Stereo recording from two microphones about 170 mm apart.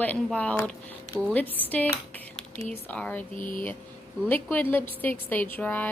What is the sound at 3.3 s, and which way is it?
Speech, 50° left (ahead or behind).